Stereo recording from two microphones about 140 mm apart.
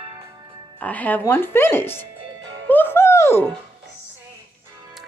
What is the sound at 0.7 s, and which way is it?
Speech, 10° left (ahead or behind).